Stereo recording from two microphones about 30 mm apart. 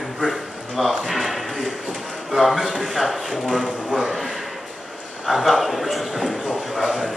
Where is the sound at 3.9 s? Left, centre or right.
Centre.